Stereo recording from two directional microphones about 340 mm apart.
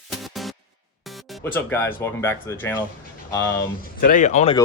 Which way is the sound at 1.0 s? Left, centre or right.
Centre.